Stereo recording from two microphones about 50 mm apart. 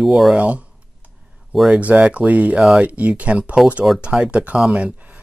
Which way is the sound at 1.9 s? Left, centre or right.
Right.